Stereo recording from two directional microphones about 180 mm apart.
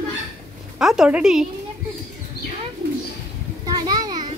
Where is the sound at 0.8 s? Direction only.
5° right (ahead or behind).